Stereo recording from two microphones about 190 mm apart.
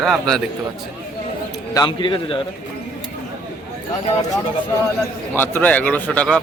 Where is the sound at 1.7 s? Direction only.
20° left (ahead or behind).